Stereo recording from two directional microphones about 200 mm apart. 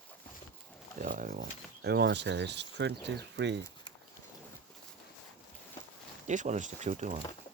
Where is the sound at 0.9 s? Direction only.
40° right (ahead or behind); by 3.6 s 60° right (ahead or behind).